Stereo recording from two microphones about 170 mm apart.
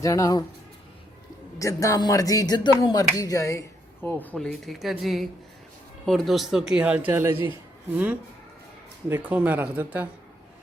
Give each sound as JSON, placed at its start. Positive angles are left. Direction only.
{"t": 0.0, "sound": "speech", "side_deg": 20}
{"t": 1.5, "sound": "speech", "side_deg": 20}